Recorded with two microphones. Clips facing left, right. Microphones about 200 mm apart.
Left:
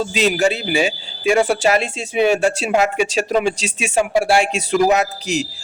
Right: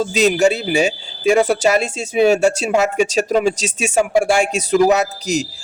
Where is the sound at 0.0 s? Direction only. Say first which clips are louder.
Right 3 dB; 40° right (ahead or behind).